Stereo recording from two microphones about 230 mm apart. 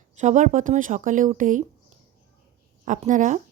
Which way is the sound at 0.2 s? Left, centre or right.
Right.